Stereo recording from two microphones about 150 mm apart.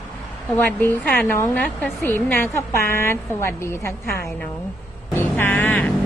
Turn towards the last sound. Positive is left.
turn(degrees=10)  # may be behind; listen again after turning